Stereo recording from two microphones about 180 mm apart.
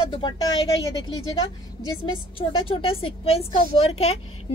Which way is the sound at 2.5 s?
30° left (ahead or behind).